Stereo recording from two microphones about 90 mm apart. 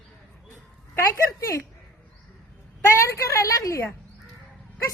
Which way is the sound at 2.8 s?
35° left (ahead or behind).